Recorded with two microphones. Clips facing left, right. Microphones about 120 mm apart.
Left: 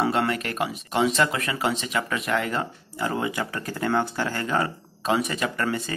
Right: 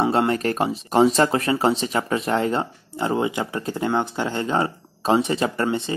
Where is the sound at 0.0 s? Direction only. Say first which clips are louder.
Right 4 dB; 25° right (ahead or behind).